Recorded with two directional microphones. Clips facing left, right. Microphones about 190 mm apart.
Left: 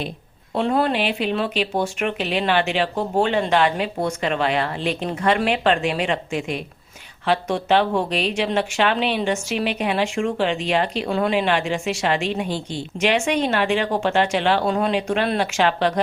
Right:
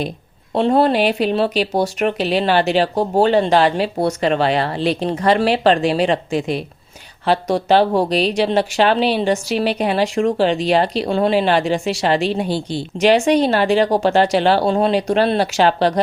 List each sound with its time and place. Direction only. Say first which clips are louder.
0.5 s speech: right 5 dB; 35° right (ahead or behind)